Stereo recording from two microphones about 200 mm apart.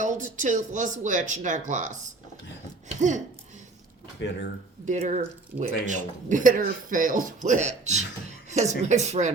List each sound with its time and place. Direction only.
0.0 s speech: 40° right (ahead or behind)
4.9 s speech: 35° right (ahead or behind)